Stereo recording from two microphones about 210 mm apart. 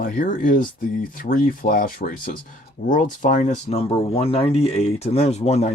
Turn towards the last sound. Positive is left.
turn(degrees=30)  # may be behind; listen again after turning